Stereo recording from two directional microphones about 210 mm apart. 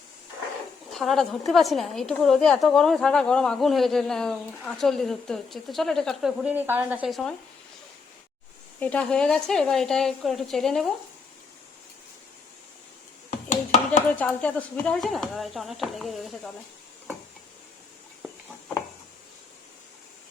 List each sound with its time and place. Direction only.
0.9 s a woman's voice: centre (ahead or behind)
8.8 s a woman's voice: 5° left (ahead or behind)
13.5 s a sound: 35° left (ahead or behind)
14.2 s a woman's voice: 5° left (ahead or behind)